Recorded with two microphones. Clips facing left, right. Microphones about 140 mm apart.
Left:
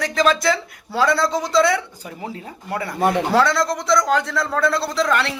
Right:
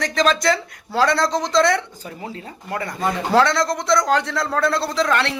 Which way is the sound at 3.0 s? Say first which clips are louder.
Left 5 dB; 65° left (ahead or behind).